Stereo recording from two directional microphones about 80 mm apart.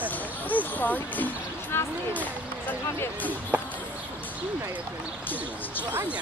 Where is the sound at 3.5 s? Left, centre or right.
Centre.